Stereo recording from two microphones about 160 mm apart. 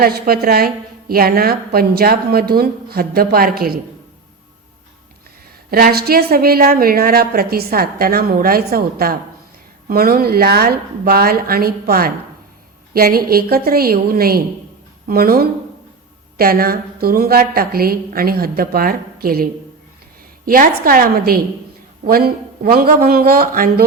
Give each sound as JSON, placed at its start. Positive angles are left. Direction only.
{"t": 0.0, "sound": "a woman's voice", "side_deg": -70}
{"t": 5.7, "sound": "a woman's voice", "side_deg": -75}